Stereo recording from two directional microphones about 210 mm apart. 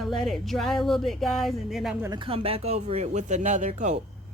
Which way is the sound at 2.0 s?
20° right (ahead or behind).